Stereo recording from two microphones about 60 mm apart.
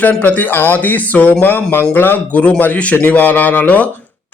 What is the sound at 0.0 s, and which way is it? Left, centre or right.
Speech, left.